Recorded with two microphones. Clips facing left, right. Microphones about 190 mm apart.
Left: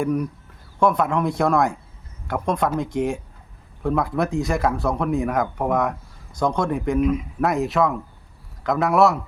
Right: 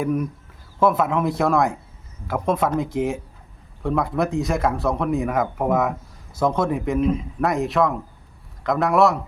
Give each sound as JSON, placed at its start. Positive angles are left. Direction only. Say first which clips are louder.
{"t": 0.0, "sound": "speech", "louder": "even", "side_deg": -5}
{"t": 7.0, "sound": "a man's voice", "louder": "left 1 dB", "side_deg": -30}
{"t": 7.4, "sound": "speech", "louder": "even", "side_deg": 0}